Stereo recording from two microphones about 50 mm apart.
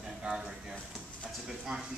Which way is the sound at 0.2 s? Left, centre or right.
Right.